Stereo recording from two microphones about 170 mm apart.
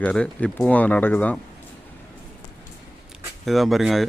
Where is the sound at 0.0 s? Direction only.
10° left (ahead or behind).